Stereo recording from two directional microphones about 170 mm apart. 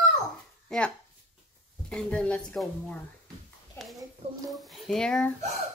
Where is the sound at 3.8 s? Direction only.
10° left (ahead or behind).